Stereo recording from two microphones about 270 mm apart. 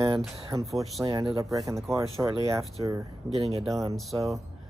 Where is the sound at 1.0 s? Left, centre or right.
Centre.